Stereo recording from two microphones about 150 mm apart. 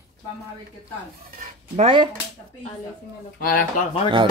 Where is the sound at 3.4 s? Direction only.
75° left (ahead or behind).